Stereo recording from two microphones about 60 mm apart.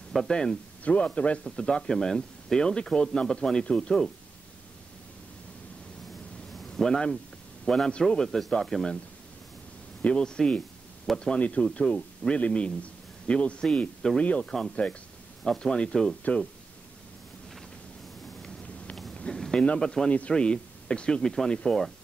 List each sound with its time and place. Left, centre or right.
0.3 s speech: centre
0.8 s a man's voice: left
1.6 s speech: centre
6.5 s a sound: centre
7.6 s speech: centre
10.0 s a man's voice: centre
15.4 s speech: centre
19.1 s a sound: centre
20.1 s speech: centre